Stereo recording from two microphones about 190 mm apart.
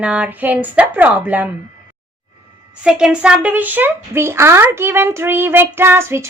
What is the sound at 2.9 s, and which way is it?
Speech, 5° right (ahead or behind).